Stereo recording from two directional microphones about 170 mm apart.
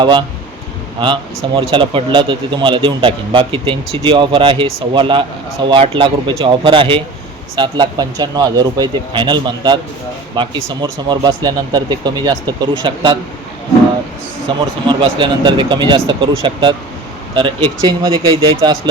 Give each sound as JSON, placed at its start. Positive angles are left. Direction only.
{"t": 0.0, "sound": "speech", "side_deg": -25}
{"t": 14.4, "sound": "speech", "side_deg": -30}